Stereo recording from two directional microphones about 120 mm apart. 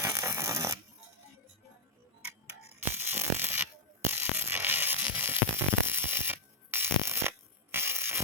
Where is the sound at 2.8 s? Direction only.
20° right (ahead or behind).